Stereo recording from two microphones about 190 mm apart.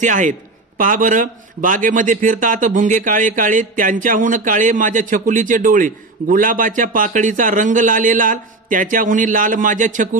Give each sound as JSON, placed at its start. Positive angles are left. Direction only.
{"t": 0.0, "sound": "a man's voice", "side_deg": -40}